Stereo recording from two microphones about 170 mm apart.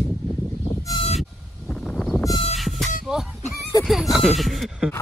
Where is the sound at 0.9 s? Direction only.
Centre (ahead or behind).